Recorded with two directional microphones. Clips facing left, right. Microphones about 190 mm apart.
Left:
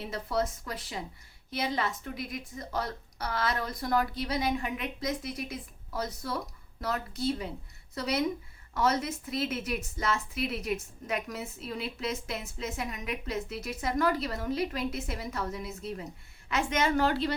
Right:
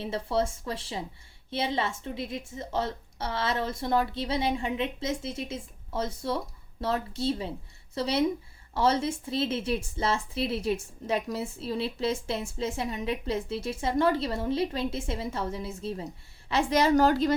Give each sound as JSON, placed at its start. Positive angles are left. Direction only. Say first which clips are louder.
{"t": 0.0, "sound": "a woman's voice", "louder": "right 3 dB", "side_deg": -30}